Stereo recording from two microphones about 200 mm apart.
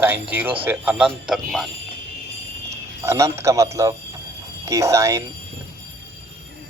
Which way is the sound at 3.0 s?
15° right (ahead or behind).